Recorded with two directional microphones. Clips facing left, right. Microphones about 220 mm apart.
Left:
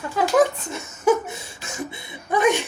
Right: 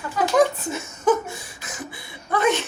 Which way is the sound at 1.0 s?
10° left (ahead or behind).